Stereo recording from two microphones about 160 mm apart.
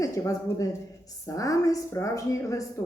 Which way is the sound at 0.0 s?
20° left (ahead or behind).